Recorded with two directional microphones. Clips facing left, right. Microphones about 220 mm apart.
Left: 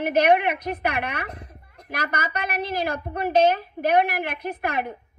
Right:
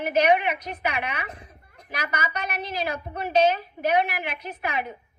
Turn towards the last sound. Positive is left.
turn(degrees=55)  # may be behind; listen again after turning